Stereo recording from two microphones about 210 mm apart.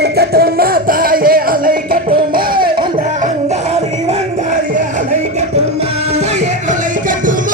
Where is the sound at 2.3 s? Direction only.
45° right (ahead or behind).